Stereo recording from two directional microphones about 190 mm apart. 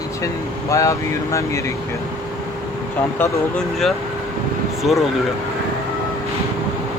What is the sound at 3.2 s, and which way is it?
Speech, 5° left (ahead or behind).